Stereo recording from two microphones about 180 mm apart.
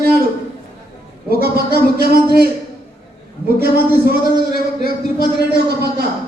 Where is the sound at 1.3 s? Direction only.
60° right (ahead or behind).